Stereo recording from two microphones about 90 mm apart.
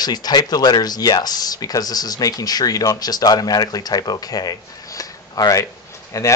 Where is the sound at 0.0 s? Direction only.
50° left (ahead or behind).